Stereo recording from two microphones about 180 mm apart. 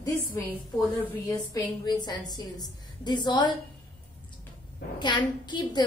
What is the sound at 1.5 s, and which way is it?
A woman's voice, 25° left (ahead or behind).